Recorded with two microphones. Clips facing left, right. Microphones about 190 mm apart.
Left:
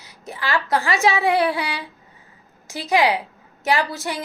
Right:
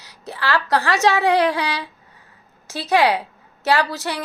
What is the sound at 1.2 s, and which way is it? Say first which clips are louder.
Speech: right 2 dB; 90° right.